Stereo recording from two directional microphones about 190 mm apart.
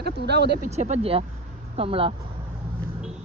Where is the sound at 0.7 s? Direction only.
35° right (ahead or behind).